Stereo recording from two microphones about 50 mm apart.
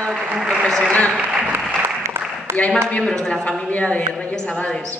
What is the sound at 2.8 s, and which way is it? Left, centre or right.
Speech, left.